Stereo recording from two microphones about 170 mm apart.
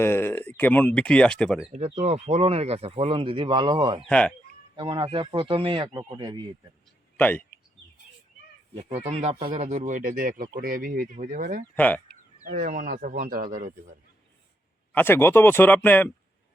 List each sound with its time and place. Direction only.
0.0 s speech: 15° left (ahead or behind)
1.7 s speech: 40° right (ahead or behind)
4.1 s speech: 5° left (ahead or behind)
4.8 s speech: 30° right (ahead or behind)
7.2 s speech: 10° left (ahead or behind)
8.7 s speech: 40° right (ahead or behind)
11.7 s speech: 10° left (ahead or behind)
12.0 s speech: 55° right (ahead or behind)
14.9 s speech: 15° left (ahead or behind)